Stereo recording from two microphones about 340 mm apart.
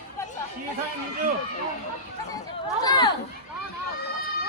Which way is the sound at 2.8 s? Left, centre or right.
Centre.